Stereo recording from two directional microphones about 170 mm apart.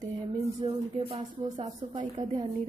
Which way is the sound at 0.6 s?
35° right (ahead or behind).